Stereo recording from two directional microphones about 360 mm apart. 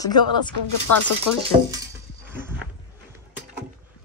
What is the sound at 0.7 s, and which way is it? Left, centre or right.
Speech, left.